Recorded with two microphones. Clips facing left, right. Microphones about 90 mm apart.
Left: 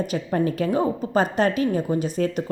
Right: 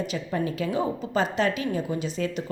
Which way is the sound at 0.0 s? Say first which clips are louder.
Left 5 dB; 45° left (ahead or behind).